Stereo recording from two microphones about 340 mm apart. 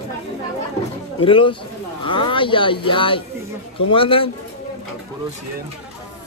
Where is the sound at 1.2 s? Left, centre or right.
Centre.